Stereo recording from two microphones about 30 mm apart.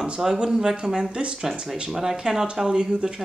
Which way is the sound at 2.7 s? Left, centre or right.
Right.